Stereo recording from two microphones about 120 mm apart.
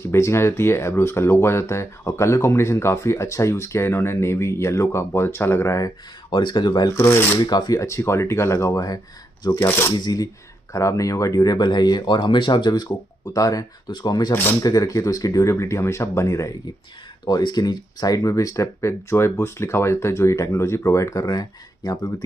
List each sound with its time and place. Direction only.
0.0 s speech: 20° left (ahead or behind)
6.3 s speech: 35° left (ahead or behind)
7.0 s speech: 25° left (ahead or behind)
7.3 s speech: 35° left (ahead or behind)
9.5 s speech: 20° left (ahead or behind)
9.9 s speech: 35° left (ahead or behind)
17.3 s speech: 35° left (ahead or behind)